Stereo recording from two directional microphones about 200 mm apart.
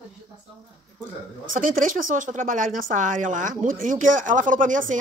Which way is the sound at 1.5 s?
40° right (ahead or behind).